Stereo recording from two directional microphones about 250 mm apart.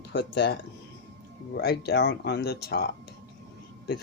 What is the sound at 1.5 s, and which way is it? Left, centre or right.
Speech, left.